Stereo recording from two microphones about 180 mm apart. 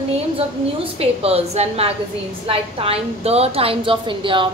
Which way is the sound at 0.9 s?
35° right (ahead or behind).